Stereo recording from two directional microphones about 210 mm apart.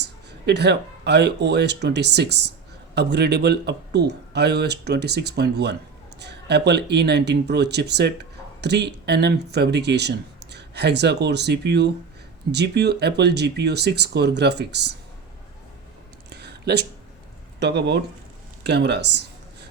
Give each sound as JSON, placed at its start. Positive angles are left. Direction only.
{"t": 0.0, "sound": "speech", "side_deg": -55}
{"t": 16.3, "sound": "a sound", "side_deg": -55}
{"t": 17.6, "sound": "speech", "side_deg": -55}